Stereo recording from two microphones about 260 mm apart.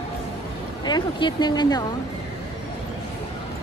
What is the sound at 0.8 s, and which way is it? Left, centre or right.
Speech, centre.